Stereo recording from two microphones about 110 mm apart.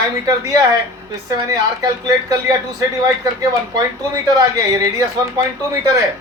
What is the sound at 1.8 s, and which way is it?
Speech, 35° right (ahead or behind).